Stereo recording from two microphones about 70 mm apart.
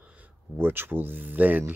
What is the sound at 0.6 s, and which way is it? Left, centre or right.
Speech, right.